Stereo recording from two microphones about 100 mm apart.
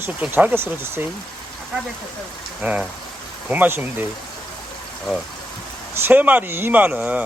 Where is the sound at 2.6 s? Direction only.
10° right (ahead or behind).